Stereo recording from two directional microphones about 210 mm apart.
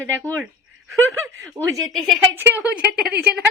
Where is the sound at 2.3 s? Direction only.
10° right (ahead or behind).